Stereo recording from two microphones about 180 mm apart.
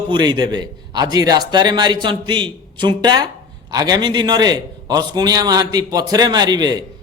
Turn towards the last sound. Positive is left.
turn(degrees=-25)  # may be behind; listen again after turning